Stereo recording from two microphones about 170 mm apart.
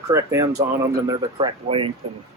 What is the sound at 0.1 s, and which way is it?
Speech, 15° right (ahead or behind).